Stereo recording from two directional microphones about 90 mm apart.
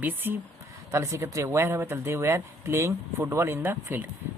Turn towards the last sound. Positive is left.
turn(degrees=-25)  # may be behind; listen again after turning